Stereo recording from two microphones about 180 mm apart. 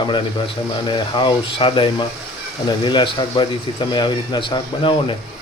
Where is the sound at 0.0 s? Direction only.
25° left (ahead or behind).